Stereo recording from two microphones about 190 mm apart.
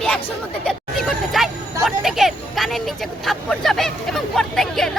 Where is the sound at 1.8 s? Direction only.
Centre (ahead or behind).